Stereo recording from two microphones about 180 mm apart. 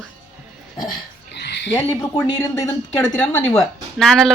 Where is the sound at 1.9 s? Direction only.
15° left (ahead or behind).